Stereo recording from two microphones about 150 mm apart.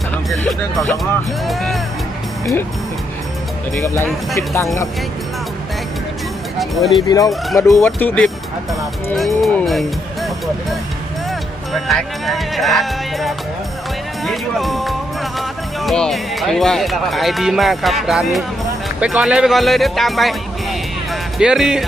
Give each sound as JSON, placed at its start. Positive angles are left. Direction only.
{"t": 0.1, "sound": "speech", "side_deg": 5}
{"t": 3.8, "sound": "speech", "side_deg": 20}
{"t": 6.6, "sound": "speech", "side_deg": 0}
{"t": 7.1, "sound": "speech", "side_deg": 25}
{"t": 9.1, "sound": "speech", "side_deg": 0}
{"t": 21.4, "sound": "speech", "side_deg": -5}